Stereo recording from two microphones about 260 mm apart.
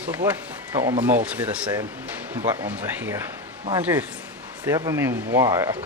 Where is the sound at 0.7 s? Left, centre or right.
Centre.